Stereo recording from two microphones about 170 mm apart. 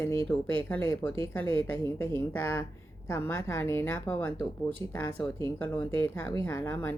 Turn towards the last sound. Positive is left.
turn(degrees=15)  # may be behind; listen again after turning